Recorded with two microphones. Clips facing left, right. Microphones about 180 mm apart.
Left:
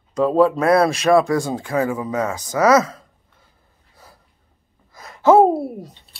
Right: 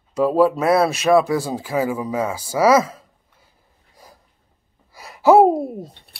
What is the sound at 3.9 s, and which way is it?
Snort, 15° right (ahead or behind).